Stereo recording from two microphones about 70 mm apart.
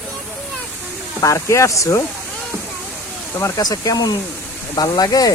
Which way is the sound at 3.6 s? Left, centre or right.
Left.